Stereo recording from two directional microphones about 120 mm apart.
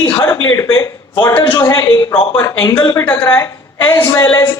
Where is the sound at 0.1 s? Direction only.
25° left (ahead or behind).